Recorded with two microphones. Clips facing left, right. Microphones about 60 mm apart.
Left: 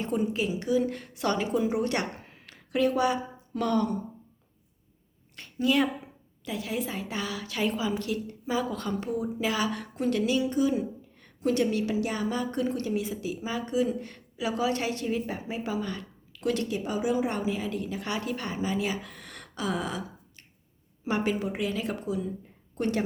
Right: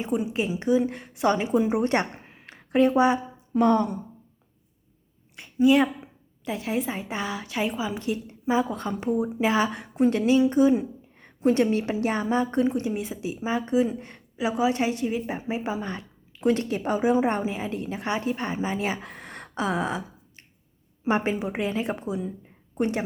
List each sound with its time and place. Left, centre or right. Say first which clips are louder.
0.0 s a woman's voice: right 1 dB; centre
0.3 s a woman's voice: right 6 dB; right
5.4 s a woman's voice: right 6 dB; centre
16.6 s a woman's voice: right 5 dB; right; by 23.0 s centre